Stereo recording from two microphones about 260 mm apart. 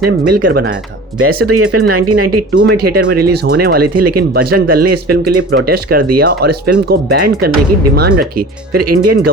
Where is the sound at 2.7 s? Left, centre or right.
Right.